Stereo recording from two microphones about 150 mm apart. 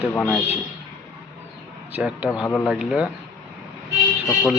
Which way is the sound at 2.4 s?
15° left (ahead or behind).